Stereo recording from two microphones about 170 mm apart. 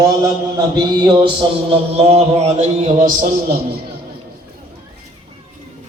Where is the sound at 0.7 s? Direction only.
25° right (ahead or behind); by 3.6 s 50° right (ahead or behind).